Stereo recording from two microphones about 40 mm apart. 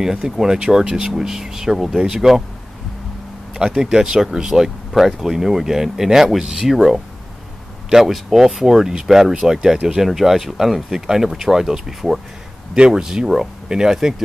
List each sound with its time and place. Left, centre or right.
0.0 s speech: centre
3.5 s speech: centre
8.1 s speech: centre
12.7 s speech: right